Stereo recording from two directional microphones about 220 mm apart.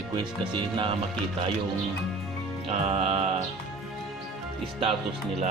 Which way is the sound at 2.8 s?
25° right (ahead or behind).